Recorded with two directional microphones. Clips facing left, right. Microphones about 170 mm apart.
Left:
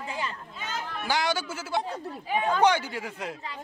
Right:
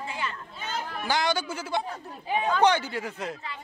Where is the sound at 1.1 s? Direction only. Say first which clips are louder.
Right 1 dB; 10° left (ahead or behind).